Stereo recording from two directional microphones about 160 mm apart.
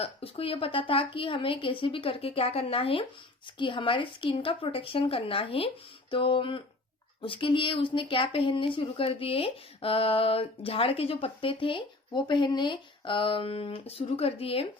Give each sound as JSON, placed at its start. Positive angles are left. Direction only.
{"t": 0.0, "sound": "speech", "side_deg": 35}